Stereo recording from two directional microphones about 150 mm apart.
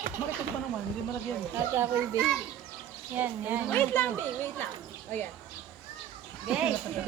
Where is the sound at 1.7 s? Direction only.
20° right (ahead or behind).